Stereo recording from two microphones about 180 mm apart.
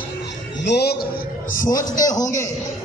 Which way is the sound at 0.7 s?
65° left (ahead or behind).